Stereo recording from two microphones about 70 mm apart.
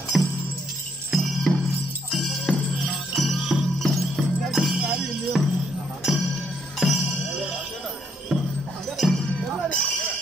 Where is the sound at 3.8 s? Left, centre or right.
Centre.